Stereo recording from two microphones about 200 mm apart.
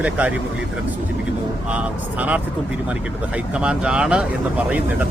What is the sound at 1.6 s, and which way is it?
Speech, 5° right (ahead or behind).